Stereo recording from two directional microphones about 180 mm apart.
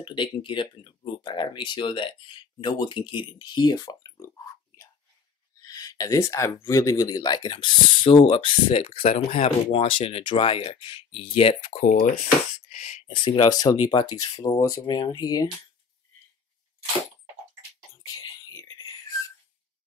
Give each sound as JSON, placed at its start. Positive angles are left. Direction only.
{"t": 0.0, "sound": "speech", "side_deg": 30}
{"t": 5.7, "sound": "speech", "side_deg": 20}
{"t": 18.0, "sound": "a sound", "side_deg": 20}